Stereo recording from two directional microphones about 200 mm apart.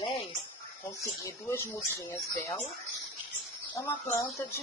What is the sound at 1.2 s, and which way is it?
Speech, 15° left (ahead or behind).